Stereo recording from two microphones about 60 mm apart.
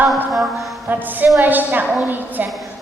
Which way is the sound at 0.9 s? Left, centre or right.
Right.